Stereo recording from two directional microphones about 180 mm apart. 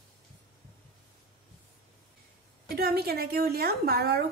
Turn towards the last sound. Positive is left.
turn(degrees=-60)  # may be behind; listen again after turning